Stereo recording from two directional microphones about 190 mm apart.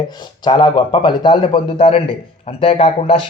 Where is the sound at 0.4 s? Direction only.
25° left (ahead or behind).